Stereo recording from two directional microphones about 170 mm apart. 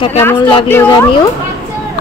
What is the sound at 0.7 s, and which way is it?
Speech, 15° left (ahead or behind).